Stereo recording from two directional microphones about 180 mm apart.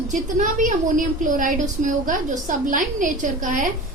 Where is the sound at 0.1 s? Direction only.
45° right (ahead or behind).